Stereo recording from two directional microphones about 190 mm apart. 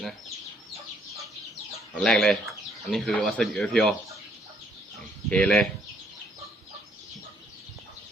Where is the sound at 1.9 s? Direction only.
5° left (ahead or behind).